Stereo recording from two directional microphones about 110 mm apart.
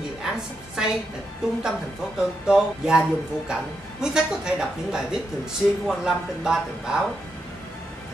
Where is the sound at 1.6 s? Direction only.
5° right (ahead or behind).